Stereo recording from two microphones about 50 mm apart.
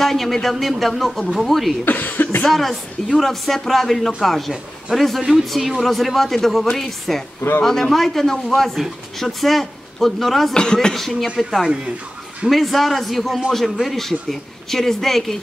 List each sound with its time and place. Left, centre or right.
0.0 s speech: centre
1.9 s speech: left
2.4 s speech: centre
10.5 s speech: centre
11.0 s speech: centre
12.4 s speech: centre